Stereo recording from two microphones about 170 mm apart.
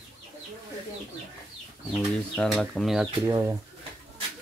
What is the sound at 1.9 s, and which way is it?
Speech, 5° left (ahead or behind).